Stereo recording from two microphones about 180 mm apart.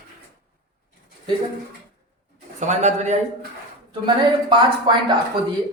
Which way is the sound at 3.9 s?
25° right (ahead or behind).